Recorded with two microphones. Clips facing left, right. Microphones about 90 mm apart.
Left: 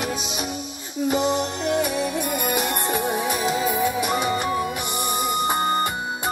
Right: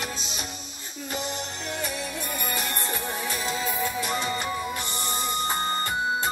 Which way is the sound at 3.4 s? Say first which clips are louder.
Left 6 dB; 20° left (ahead or behind).